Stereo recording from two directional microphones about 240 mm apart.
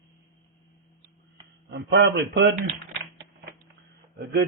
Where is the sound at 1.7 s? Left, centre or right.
Right.